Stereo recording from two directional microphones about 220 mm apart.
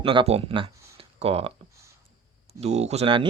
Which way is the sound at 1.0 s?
25° right (ahead or behind).